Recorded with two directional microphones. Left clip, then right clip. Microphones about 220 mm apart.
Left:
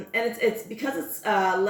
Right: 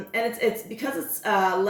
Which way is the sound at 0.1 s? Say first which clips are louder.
Even; centre (ahead or behind).